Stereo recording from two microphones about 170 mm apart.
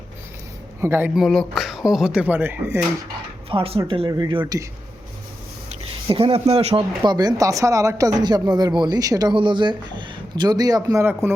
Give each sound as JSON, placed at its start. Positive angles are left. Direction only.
{"t": 0.8, "sound": "speech", "side_deg": -10}
{"t": 3.5, "sound": "speech", "side_deg": -30}
{"t": 6.1, "sound": "speech", "side_deg": -30}
{"t": 7.0, "sound": "speech", "side_deg": -25}